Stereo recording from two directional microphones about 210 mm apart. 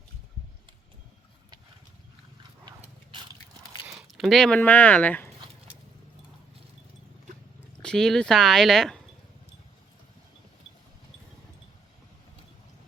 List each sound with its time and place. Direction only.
2.6 s a sound: 25° right (ahead or behind)
3.8 s speech: 5° right (ahead or behind)
7.8 s speech: 5° left (ahead or behind)